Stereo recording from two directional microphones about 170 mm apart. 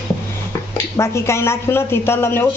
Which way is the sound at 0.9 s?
15° left (ahead or behind).